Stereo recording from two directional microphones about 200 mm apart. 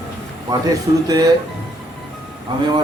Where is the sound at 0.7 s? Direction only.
20° right (ahead or behind).